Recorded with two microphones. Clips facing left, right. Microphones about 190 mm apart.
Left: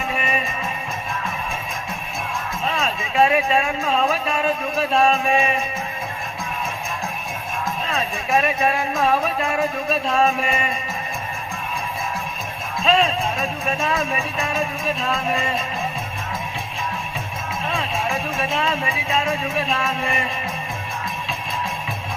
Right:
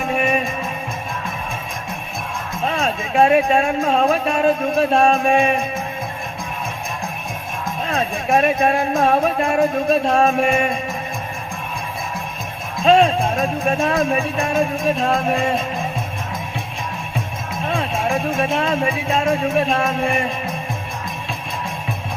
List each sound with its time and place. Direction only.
0.0 s music: 50° right (ahead or behind)
2.6 s speech: 50° right (ahead or behind)
7.9 s speech: 50° right (ahead or behind)
12.8 s speech: 55° right (ahead or behind)
17.7 s speech: 55° right (ahead or behind)